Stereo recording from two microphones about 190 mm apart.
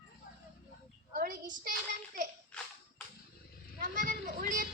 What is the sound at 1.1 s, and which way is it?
Child singing, 50° right (ahead or behind).